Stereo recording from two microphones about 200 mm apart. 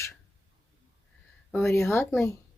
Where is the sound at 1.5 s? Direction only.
10° left (ahead or behind).